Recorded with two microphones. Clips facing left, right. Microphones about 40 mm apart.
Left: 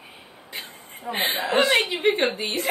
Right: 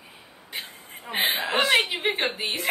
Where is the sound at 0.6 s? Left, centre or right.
Centre.